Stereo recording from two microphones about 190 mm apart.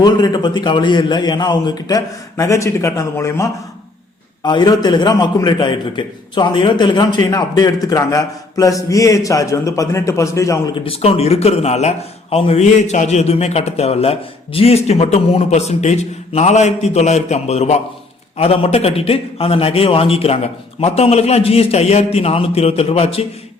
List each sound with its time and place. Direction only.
0.0 s a man's voice: 20° left (ahead or behind)
10.8 s a man's voice: 30° left (ahead or behind)